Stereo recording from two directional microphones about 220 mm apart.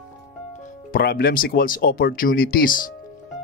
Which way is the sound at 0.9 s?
45° left (ahead or behind).